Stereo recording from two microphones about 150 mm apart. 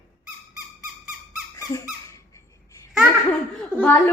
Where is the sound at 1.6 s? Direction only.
20° left (ahead or behind).